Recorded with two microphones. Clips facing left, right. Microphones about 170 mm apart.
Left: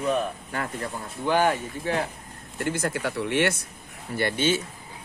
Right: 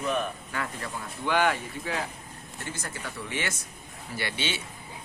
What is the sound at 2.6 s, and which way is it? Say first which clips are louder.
Speech: left 11 dB; 65° left (ahead or behind).